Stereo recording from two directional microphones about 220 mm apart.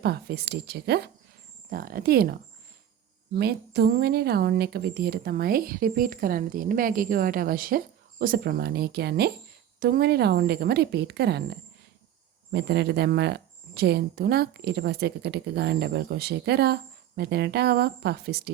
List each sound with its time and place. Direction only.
0.0 s speech: 45° right (ahead or behind)
12.5 s speech: 50° right (ahead or behind)